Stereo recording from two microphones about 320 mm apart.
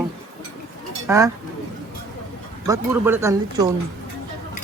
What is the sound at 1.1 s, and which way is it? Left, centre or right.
Speech, centre.